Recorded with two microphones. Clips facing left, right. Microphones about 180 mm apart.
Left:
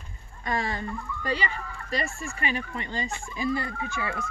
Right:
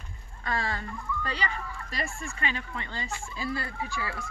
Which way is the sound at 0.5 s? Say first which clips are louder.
Left 3 dB; 15° left (ahead or behind).